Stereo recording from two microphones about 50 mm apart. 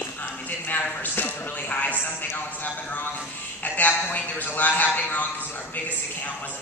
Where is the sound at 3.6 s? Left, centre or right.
Left.